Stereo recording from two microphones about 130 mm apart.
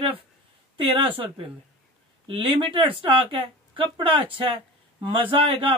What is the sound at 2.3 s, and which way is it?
Speech, 40° right (ahead or behind).